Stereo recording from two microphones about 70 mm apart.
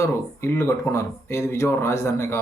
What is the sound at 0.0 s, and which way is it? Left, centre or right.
A man's voice, left.